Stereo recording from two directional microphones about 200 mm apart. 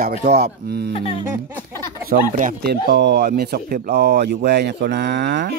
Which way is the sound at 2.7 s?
55° right (ahead or behind).